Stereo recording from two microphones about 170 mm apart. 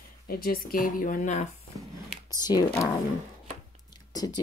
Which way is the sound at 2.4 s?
25° left (ahead or behind).